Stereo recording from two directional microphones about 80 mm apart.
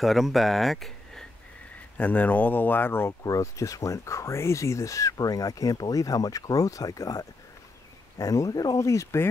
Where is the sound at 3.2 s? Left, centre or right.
Left.